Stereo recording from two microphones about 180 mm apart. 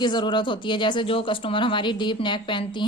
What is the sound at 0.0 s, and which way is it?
Speech, 25° left (ahead or behind).